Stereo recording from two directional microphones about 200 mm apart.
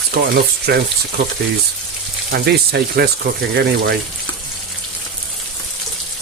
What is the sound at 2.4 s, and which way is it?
Speech, 55° right (ahead or behind).